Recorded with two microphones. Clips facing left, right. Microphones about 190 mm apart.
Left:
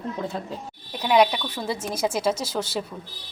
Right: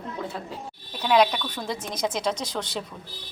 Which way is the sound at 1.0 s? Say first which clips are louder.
Left 1 dB; 10° left (ahead or behind).